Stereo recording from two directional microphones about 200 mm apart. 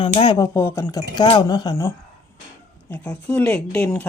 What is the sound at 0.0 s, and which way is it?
Speech, 25° left (ahead or behind).